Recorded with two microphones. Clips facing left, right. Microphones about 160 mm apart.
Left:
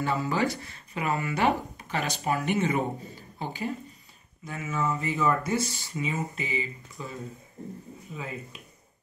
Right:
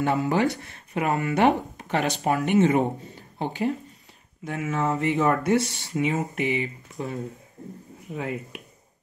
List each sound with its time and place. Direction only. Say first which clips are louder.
0.0 s speech: right 5 dB; 60° right (ahead or behind)
1.8 s a sound: right 6 dB; 65° right (ahead or behind)
2.2 s speech: right 6 dB; 60° right (ahead or behind)
4.5 s speech: right 4 dB; 70° right (ahead or behind)